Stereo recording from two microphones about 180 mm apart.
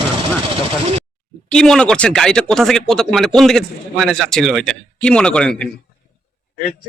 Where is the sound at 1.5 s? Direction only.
5° left (ahead or behind).